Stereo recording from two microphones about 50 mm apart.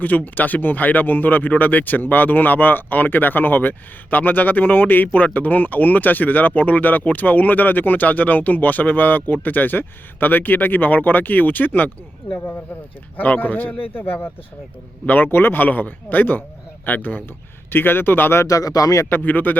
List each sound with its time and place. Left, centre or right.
0.0 s speech: left
5.1 s speech: left
13.1 s speech: left
15.3 s speech: left